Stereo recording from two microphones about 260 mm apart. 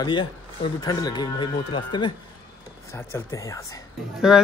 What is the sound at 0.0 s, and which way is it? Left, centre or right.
Speech, centre.